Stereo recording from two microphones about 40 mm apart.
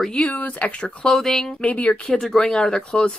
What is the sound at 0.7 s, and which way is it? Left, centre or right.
Speech, left.